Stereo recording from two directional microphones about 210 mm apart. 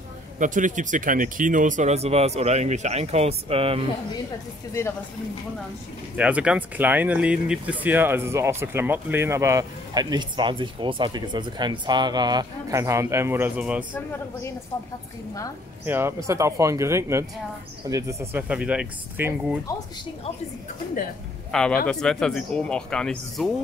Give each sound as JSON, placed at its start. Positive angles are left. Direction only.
{"t": 0.4, "sound": "speech", "side_deg": -35}
{"t": 6.1, "sound": "speech", "side_deg": -5}
{"t": 15.8, "sound": "speech", "side_deg": -10}
{"t": 21.5, "sound": "speech", "side_deg": 5}